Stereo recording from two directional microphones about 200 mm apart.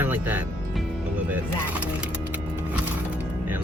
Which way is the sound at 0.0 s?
10° right (ahead or behind).